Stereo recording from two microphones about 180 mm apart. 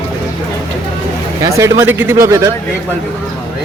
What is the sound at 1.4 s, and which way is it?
Speech, 15° right (ahead or behind).